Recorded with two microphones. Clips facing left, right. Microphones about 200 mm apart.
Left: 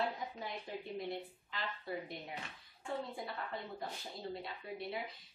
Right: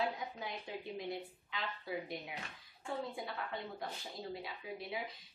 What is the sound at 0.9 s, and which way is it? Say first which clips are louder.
A woman's voice: left 1 dB; centre (ahead or behind).